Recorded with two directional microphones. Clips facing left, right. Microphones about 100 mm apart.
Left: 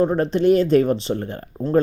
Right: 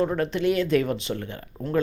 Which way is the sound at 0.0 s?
35° left (ahead or behind).